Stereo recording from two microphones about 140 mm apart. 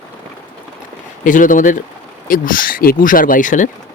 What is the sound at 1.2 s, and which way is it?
Speech, 70° left (ahead or behind).